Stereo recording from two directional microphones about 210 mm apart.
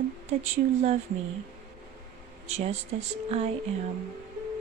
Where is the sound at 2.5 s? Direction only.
30° right (ahead or behind).